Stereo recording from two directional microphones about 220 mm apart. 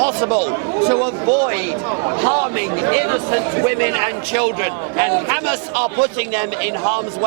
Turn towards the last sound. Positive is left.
turn(degrees=-15)  # may be behind; listen again after turning